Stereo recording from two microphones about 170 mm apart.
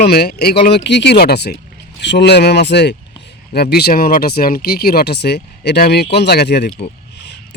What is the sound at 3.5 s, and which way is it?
Speech, 70° left (ahead or behind).